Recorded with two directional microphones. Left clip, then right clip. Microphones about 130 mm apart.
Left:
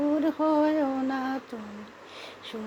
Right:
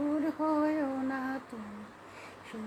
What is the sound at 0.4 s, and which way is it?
Music, 35° left (ahead or behind).